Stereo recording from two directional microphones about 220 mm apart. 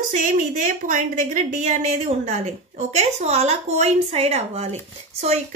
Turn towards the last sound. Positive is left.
turn(degrees=-30)  # may be behind; listen again after turning